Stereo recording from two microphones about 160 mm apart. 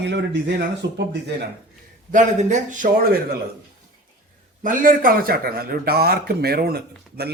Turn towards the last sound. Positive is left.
turn(degrees=-75)  # may be behind; listen again after turning